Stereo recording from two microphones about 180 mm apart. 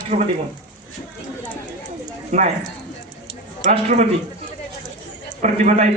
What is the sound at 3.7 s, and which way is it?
Speech, 35° right (ahead or behind).